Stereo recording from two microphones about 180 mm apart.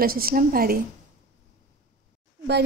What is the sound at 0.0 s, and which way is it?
Speech, 55° right (ahead or behind).